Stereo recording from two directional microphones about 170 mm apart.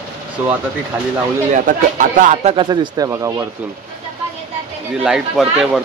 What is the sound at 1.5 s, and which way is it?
Speech, 50° right (ahead or behind).